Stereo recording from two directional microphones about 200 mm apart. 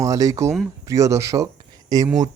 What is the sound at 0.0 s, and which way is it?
Speech, 15° right (ahead or behind).